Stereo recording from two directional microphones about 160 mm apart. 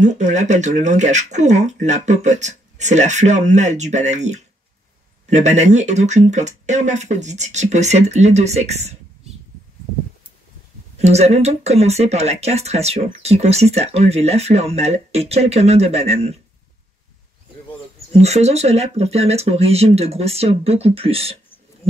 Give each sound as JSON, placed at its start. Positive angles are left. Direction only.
{"t": 0.0, "sound": "speech", "side_deg": -50}
{"t": 11.0, "sound": "speech", "side_deg": -40}
{"t": 18.1, "sound": "speech", "side_deg": -40}